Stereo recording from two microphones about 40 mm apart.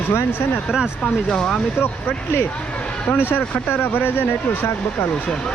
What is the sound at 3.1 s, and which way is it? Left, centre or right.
Speech, left.